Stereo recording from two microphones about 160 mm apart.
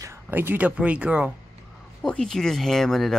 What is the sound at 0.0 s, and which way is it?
Speech, 15° right (ahead or behind).